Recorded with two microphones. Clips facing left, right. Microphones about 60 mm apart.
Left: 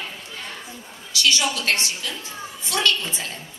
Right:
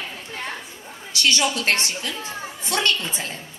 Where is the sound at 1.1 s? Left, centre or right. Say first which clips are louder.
Right 1 dB; right.